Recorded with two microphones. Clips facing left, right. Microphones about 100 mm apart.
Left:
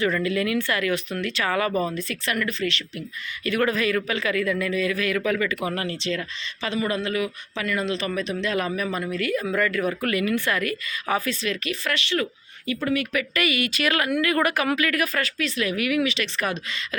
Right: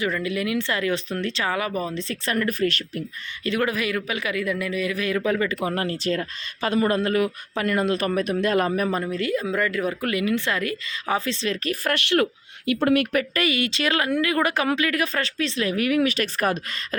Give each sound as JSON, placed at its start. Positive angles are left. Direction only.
{"t": 0.0, "sound": "speech", "side_deg": -15}
{"t": 1.5, "sound": "speech", "side_deg": -15}
{"t": 2.0, "sound": "a man's voice", "side_deg": -30}
{"t": 3.6, "sound": "a man's voice", "side_deg": -15}
{"t": 9.1, "sound": "speech", "side_deg": -25}
{"t": 11.6, "sound": "speech", "side_deg": -45}
{"t": 13.1, "sound": "speech", "side_deg": -35}